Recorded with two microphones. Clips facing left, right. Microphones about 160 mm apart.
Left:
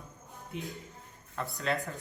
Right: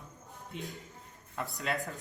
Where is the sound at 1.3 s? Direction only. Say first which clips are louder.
Left 2 dB; centre (ahead or behind).